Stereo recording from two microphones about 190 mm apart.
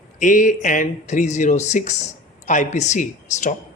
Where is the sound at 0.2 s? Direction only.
45° left (ahead or behind).